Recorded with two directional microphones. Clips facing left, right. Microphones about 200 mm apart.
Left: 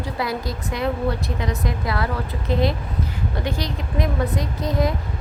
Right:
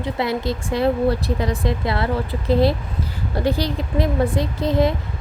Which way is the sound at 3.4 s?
35° right (ahead or behind).